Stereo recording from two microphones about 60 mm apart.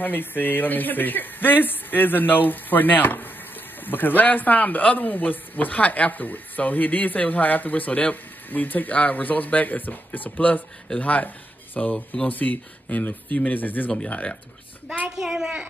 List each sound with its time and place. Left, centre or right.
0.0 s a man's voice: left
15.1 s a child's voice: centre